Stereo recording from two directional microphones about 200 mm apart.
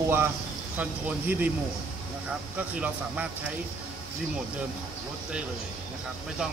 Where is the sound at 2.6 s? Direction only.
5° right (ahead or behind).